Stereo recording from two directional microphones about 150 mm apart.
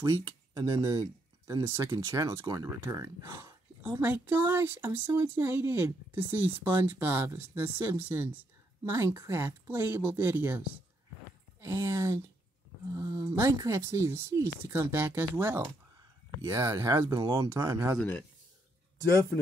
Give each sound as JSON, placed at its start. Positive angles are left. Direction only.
{"t": 0.0, "sound": "speech", "side_deg": -20}